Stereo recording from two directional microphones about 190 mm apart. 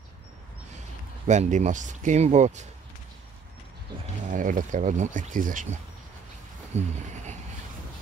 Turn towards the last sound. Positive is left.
turn(degrees=-40)  # may be behind; listen again after turning